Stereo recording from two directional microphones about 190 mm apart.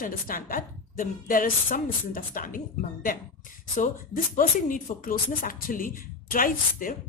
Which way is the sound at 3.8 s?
45° left (ahead or behind).